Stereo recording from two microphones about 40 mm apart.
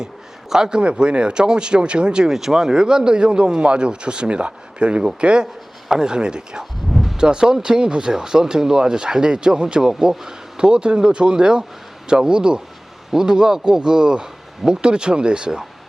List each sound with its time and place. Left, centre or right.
0.5 s a man's voice: centre
2.3 s a man's voice: centre
6.9 s a sound: centre
7.2 s a man's voice: centre